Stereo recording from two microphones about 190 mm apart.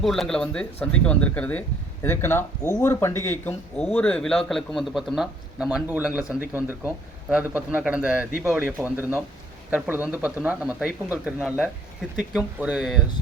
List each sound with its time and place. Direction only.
0.0 s speech: centre (ahead or behind)